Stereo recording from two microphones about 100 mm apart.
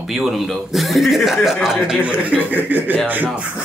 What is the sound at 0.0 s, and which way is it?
Speech, centre (ahead or behind).